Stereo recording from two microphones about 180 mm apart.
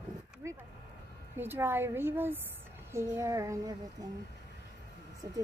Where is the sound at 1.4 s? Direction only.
10° right (ahead or behind).